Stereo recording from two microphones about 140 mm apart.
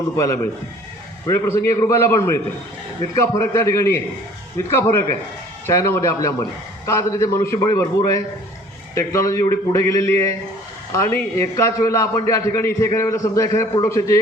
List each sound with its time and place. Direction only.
1.3 s a man's voice: 20° left (ahead or behind)